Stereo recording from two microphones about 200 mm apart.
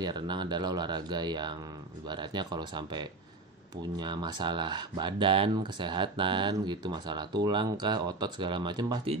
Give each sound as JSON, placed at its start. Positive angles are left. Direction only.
{"t": 0.0, "sound": "speech", "side_deg": -20}